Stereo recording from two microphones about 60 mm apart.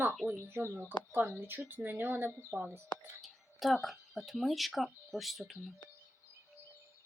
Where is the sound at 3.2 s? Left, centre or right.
Centre.